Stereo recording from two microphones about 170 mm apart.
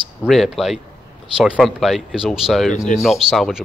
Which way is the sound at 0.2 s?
Centre (ahead or behind).